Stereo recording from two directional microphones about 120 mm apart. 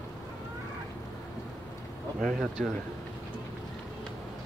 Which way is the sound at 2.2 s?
5° left (ahead or behind).